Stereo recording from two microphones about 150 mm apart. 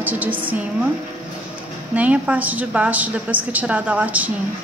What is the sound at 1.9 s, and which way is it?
A woman's voice, 10° right (ahead or behind).